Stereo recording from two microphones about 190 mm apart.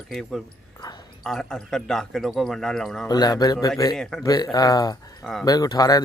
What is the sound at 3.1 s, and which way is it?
Speech, 20° left (ahead or behind).